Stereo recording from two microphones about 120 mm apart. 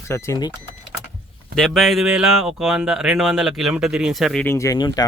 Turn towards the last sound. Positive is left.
turn(degrees=40)  # may be behind; listen again after turning